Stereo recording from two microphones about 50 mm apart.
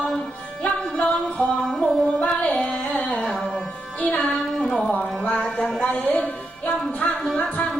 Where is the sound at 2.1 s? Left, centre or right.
Left.